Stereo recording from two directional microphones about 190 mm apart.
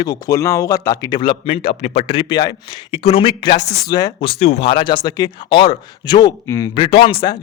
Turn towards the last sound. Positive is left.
turn(degrees=25)  # may be behind; listen again after turning